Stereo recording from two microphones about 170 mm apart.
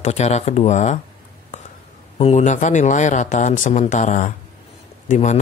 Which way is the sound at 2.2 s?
40° left (ahead or behind).